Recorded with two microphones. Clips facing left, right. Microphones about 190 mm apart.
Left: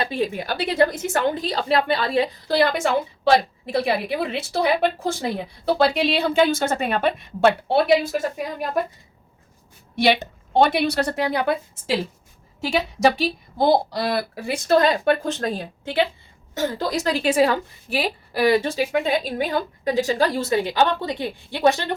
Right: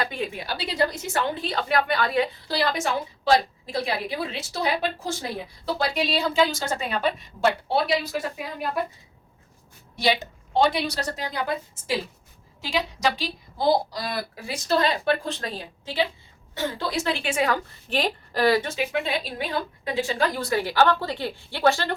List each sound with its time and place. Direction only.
0.0 s a woman's voice: 30° left (ahead or behind)
0.3 s a woman's voice: 50° left (ahead or behind); by 2.3 s 30° left (ahead or behind)
2.5 s a woman's voice: 55° left (ahead or behind)
8.8 s a woman's voice: 45° left (ahead or behind)
9.9 s a woman's voice: 60° left (ahead or behind)
16.6 s a woman's voice: 40° left (ahead or behind)
17.7 s a woman's voice: 10° left (ahead or behind)
18.6 s a woman's voice: 35° left (ahead or behind)
18.9 s a woman's voice: 45° left (ahead or behind); by 21.9 s 20° left (ahead or behind)